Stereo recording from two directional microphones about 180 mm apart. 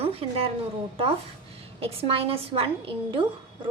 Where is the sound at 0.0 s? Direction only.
35° right (ahead or behind).